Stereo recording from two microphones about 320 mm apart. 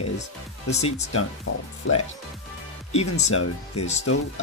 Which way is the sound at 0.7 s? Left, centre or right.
Left.